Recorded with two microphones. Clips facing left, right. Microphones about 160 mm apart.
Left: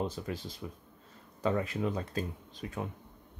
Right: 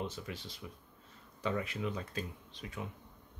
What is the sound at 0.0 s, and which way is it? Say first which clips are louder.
Speech: left 6 dB; 40° left (ahead or behind).